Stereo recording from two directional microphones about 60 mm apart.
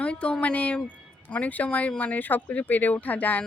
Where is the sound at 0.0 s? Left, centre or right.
Centre.